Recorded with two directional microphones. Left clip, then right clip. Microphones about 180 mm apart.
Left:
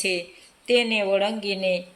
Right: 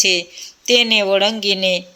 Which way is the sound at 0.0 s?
25° right (ahead or behind).